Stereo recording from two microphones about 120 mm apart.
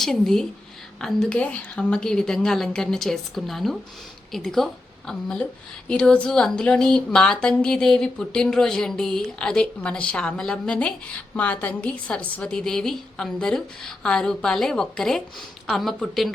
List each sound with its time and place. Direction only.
0.0 s a woman's voice: 5° left (ahead or behind)